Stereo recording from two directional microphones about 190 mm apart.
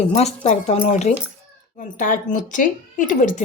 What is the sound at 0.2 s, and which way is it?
A woman's voice, 35° left (ahead or behind).